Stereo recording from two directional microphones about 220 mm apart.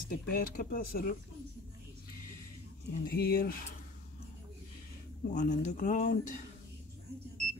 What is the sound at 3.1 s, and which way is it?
Speech, 45° left (ahead or behind).